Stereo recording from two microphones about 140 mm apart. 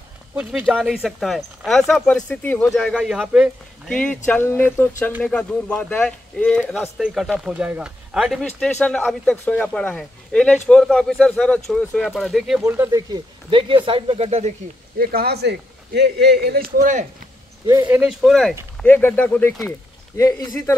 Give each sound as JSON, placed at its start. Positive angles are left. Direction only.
{"t": 0.4, "sound": "speech", "side_deg": -10}
{"t": 3.9, "sound": "speech", "side_deg": 10}
{"t": 12.6, "sound": "speech", "side_deg": -20}
{"t": 13.5, "sound": "speech", "side_deg": -40}
{"t": 15.0, "sound": "speech", "side_deg": -90}
{"t": 16.4, "sound": "speech", "side_deg": -90}
{"t": 17.8, "sound": "speech", "side_deg": -10}
{"t": 18.8, "sound": "speech", "side_deg": 15}
{"t": 20.2, "sound": "a man's voice", "side_deg": 25}